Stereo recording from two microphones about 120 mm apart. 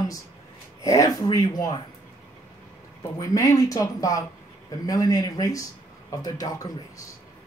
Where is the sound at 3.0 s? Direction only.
30° left (ahead or behind).